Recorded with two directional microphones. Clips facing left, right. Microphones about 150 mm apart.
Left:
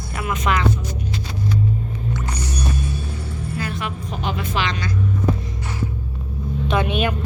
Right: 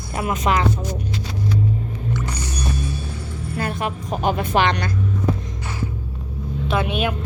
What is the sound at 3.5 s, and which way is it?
Speech, 50° right (ahead or behind).